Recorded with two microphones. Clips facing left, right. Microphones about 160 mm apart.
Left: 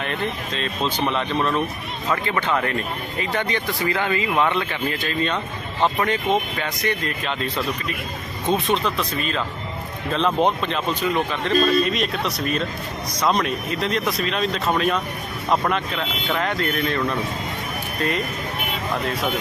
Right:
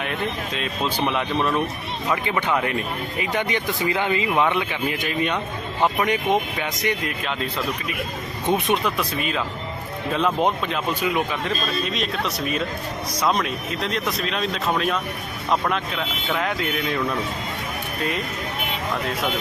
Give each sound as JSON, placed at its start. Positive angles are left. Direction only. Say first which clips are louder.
{"t": 0.0, "sound": "speech", "louder": "even", "side_deg": -5}
{"t": 8.4, "sound": "speech", "louder": "even", "side_deg": -15}